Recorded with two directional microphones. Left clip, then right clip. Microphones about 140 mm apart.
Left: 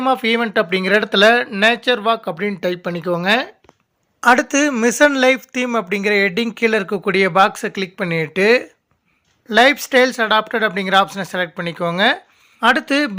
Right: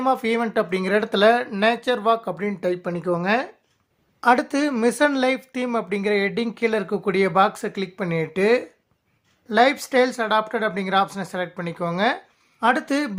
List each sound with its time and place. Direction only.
0.0 s speech: 15° left (ahead or behind)